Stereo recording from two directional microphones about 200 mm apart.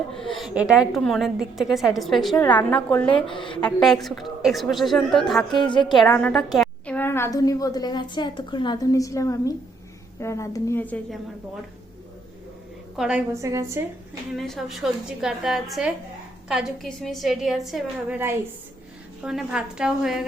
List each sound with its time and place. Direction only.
0.1 s a woman's voice: centre (ahead or behind)
3.2 s a woman's voice: 25° left (ahead or behind)
3.8 s a woman's voice: centre (ahead or behind)
5.5 s a woman's voice: 25° left (ahead or behind)
5.9 s a woman's voice: 5° left (ahead or behind)
13.0 s a woman's voice: 5° right (ahead or behind)
14.3 s a woman's voice: centre (ahead or behind)
19.2 s a woman's voice: 5° right (ahead or behind)